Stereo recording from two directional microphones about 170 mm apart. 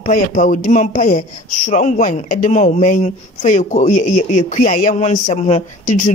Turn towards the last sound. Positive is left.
turn(degrees=45)  # may be behind; listen again after turning